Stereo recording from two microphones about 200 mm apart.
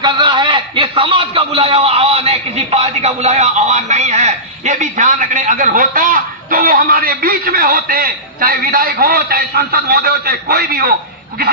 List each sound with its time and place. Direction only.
0.0 s a man's voice: 25° right (ahead or behind); by 10.9 s 50° right (ahead or behind)